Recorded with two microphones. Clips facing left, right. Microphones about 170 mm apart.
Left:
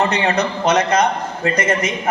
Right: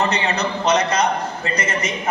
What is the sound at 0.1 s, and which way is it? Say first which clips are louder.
A man's voice: left 3 dB; 50° left (ahead or behind).